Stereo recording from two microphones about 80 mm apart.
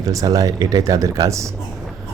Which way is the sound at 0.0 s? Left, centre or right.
Right.